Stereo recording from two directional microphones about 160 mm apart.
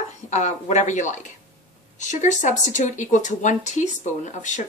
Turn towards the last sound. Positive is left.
turn(degrees=50)  # may be behind; listen again after turning